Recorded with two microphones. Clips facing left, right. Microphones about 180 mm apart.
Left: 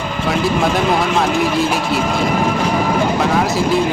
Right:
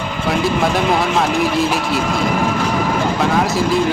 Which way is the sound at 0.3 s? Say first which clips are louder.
Even; centre (ahead or behind).